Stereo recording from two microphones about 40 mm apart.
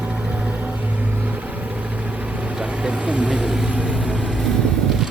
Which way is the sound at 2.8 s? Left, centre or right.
Right.